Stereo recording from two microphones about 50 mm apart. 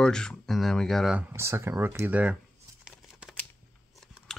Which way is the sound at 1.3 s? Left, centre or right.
Right.